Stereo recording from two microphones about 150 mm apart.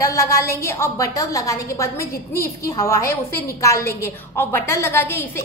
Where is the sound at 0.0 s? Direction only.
20° left (ahead or behind).